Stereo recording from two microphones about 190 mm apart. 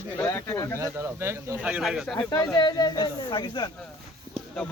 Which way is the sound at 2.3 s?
20° left (ahead or behind).